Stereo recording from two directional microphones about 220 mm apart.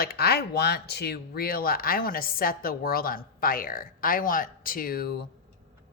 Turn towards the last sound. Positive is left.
turn(degrees=45)  # may be behind; listen again after turning